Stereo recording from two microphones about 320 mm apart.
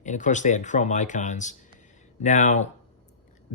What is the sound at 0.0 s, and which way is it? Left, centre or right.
Speech, left.